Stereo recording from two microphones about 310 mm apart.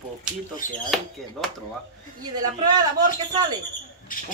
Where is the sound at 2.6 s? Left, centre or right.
Centre.